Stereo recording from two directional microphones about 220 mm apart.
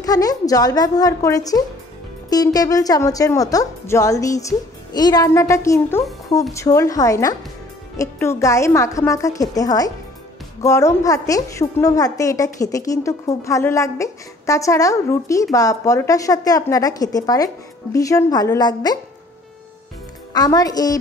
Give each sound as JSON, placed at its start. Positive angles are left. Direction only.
{"t": 0.0, "sound": "a woman's voice", "side_deg": 15}
{"t": 20.3, "sound": "a woman's voice", "side_deg": 15}